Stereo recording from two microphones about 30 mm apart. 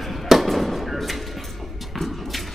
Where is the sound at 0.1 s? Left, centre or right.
Centre.